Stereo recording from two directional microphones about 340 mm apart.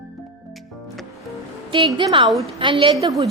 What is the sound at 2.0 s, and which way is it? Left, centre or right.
A woman's voice, centre.